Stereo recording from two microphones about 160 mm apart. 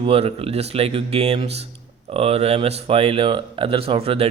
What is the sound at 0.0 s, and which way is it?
Speech, 40° right (ahead or behind).